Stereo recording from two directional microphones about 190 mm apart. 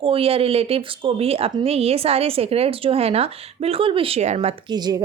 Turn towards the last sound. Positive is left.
turn(degrees=-20)  # may be behind; listen again after turning